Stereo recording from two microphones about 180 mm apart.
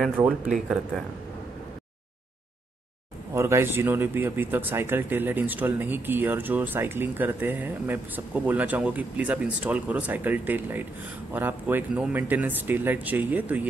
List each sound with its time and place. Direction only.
0.2 s speech: 15° right (ahead or behind)
3.3 s speech: 15° right (ahead or behind)